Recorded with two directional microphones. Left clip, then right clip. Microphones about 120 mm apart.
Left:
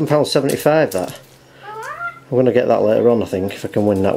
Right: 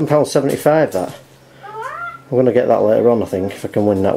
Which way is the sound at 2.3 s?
20° left (ahead or behind).